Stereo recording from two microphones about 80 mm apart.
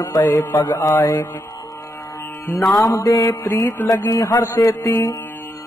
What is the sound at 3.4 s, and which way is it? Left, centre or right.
Music, left.